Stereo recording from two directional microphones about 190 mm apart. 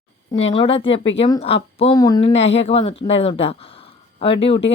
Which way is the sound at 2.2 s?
35° left (ahead or behind).